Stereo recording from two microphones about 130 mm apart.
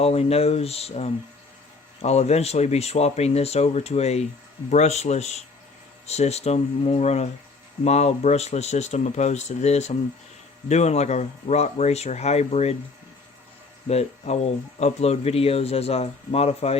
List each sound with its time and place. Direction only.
0.0 s speech: 50° left (ahead or behind)
13.8 s speech: 55° left (ahead or behind)